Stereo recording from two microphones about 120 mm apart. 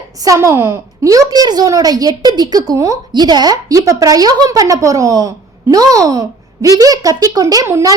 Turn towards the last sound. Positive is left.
turn(degrees=-20)  # may be behind; listen again after turning